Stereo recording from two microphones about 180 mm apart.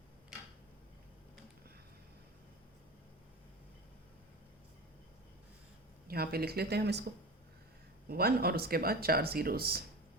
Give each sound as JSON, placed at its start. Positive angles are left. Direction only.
{"t": 6.1, "sound": "speech", "side_deg": -60}
{"t": 8.0, "sound": "speech", "side_deg": -60}